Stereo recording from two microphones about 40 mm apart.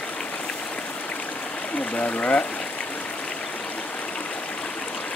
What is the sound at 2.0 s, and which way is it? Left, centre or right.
Speech, left.